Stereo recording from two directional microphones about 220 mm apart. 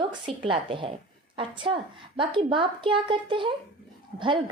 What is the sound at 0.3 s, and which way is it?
Speech, 25° right (ahead or behind).